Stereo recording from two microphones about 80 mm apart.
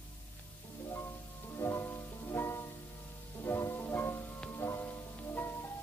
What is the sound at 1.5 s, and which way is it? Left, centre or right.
Music, left.